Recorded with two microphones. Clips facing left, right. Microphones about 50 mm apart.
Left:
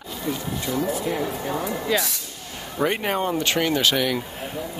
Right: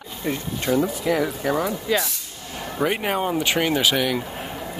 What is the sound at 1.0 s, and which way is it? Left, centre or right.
Speech, right.